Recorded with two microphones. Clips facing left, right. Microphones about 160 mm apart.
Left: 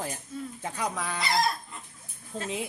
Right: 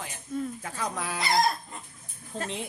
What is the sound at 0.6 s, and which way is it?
Speech, 20° left (ahead or behind).